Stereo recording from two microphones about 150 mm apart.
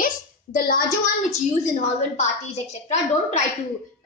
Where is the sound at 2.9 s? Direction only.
50° left (ahead or behind).